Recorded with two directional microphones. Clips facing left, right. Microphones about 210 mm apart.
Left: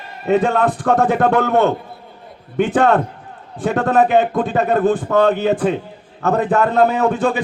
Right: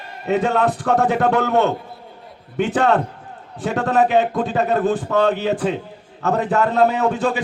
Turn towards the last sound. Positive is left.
turn(degrees=55)  # may be behind; listen again after turning